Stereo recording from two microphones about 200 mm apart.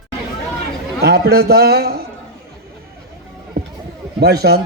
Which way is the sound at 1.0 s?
50° right (ahead or behind).